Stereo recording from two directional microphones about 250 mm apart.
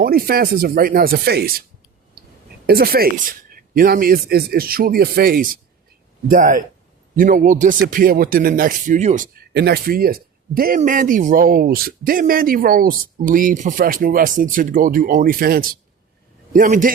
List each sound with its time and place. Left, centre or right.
0.0 s speech: right
2.6 s a man's voice: right